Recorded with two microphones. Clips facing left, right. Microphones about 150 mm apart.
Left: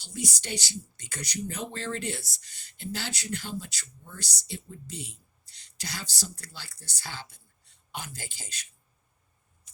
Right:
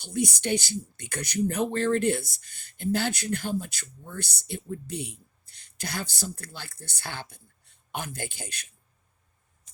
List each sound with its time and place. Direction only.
0.0 s speech: 60° right (ahead or behind)